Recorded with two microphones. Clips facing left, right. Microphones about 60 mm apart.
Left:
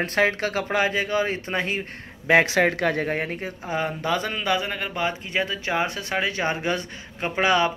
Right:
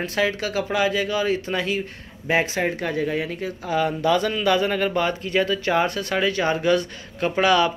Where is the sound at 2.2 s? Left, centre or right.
Left.